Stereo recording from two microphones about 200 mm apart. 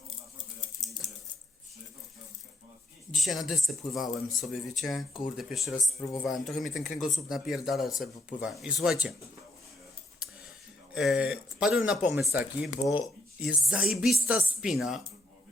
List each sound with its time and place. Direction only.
3.2 s speech: centre (ahead or behind)
6.8 s speech: 40° left (ahead or behind)
7.1 s speech: centre (ahead or behind)
10.9 s speech: centre (ahead or behind)